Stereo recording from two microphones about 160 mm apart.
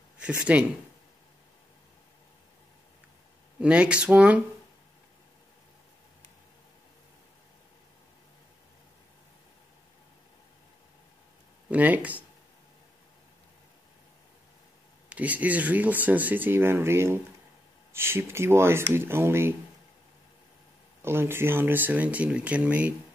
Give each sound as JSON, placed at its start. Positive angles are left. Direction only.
{"t": 0.2, "sound": "speech", "side_deg": -5}
{"t": 3.5, "sound": "speech", "side_deg": -5}
{"t": 11.7, "sound": "speech", "side_deg": -10}
{"t": 15.0, "sound": "speech", "side_deg": -10}
{"t": 21.0, "sound": "speech", "side_deg": -15}